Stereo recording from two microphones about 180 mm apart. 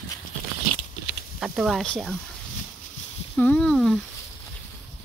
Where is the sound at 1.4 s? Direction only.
Centre (ahead or behind).